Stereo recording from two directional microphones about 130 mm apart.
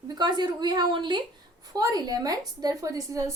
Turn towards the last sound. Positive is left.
turn(degrees=-25)  # may be behind; listen again after turning